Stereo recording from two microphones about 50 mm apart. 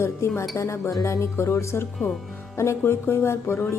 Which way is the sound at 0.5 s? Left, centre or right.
Left.